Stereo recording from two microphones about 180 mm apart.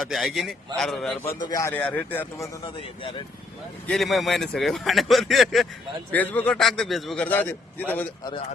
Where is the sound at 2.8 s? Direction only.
30° left (ahead or behind).